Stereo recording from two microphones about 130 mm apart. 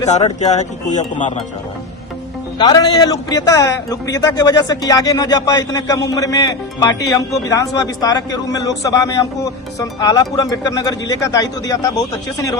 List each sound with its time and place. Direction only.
0.3 s speech: 65° left (ahead or behind)
2.6 s a man's voice: 35° left (ahead or behind)